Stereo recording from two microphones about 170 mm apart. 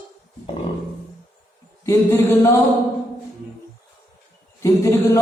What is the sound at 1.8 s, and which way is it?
Mantra, 15° left (ahead or behind).